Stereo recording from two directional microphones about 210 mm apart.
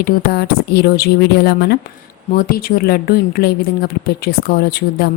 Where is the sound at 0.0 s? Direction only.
50° left (ahead or behind).